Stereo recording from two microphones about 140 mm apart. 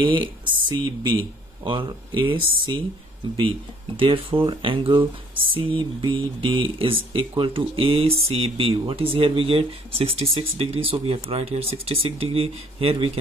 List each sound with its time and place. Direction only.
0.0 s speech: 35° right (ahead or behind)